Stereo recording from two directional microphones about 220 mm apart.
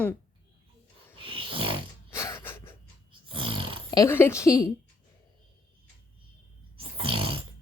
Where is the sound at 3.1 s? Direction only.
25° right (ahead or behind).